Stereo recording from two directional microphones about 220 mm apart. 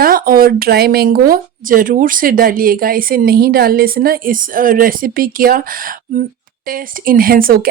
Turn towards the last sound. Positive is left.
turn(degrees=-40)  # may be behind; listen again after turning